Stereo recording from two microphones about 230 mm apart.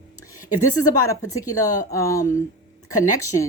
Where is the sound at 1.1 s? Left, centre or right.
Centre.